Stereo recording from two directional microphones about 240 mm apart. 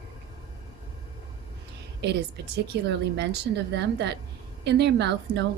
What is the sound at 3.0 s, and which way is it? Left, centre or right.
A woman's voice, right.